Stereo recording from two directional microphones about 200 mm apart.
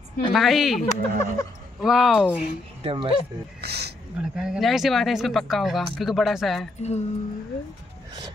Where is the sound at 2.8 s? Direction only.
25° right (ahead or behind).